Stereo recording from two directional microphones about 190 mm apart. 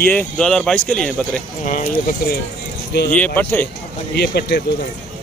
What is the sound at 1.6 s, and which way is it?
Speech, 40° left (ahead or behind).